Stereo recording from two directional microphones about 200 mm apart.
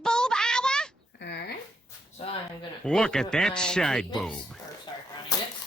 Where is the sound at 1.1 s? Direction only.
55° left (ahead or behind).